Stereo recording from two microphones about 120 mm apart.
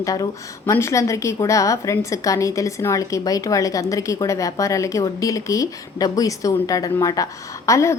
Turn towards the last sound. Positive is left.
turn(degrees=25)  # may be behind; listen again after turning